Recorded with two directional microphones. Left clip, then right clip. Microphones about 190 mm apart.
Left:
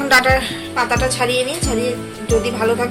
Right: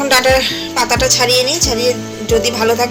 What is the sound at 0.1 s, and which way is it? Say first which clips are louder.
Speech: right 1 dB; 20° right (ahead or behind).